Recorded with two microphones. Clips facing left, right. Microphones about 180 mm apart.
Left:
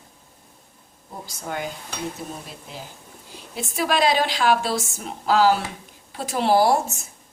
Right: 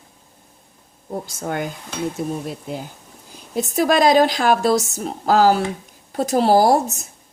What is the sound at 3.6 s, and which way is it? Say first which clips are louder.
A woman's voice: right 6 dB; 40° right (ahead or behind).